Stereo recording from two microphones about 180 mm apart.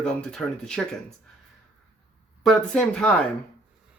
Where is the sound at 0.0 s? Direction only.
5° left (ahead or behind).